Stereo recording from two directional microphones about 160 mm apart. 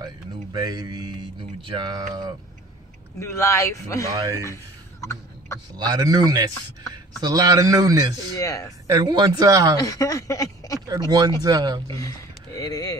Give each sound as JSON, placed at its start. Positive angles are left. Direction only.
{"t": 0.0, "sound": "a sound", "side_deg": -25}
{"t": 1.6, "sound": "a man's voice", "side_deg": -30}
{"t": 3.2, "sound": "speech", "side_deg": 20}
{"t": 4.1, "sound": "a man's voice", "side_deg": -20}
{"t": 5.8, "sound": "a man's voice", "side_deg": -25}
{"t": 8.4, "sound": "speech", "side_deg": 20}
{"t": 8.9, "sound": "a man's voice", "side_deg": -25}
{"t": 9.8, "sound": "speech", "side_deg": 20}
{"t": 10.9, "sound": "a man's voice", "side_deg": -25}
{"t": 11.9, "sound": "speech", "side_deg": 20}